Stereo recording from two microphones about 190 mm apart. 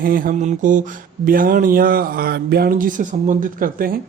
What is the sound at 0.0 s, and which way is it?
Speech, 50° right (ahead or behind).